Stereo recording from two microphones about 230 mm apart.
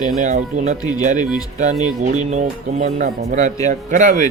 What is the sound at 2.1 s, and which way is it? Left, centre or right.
Speech, right.